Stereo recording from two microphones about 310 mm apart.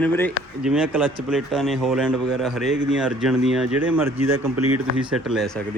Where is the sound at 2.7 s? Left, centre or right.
Right.